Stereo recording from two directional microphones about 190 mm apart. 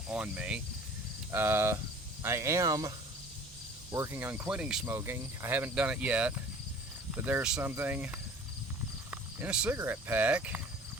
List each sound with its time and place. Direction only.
0.1 s speech: 5° right (ahead or behind)
3.9 s speech: 15° right (ahead or behind)